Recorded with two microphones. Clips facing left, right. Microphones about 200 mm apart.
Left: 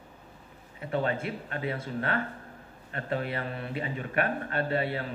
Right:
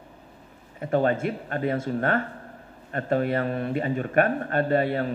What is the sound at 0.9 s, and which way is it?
A man's voice, 45° right (ahead or behind).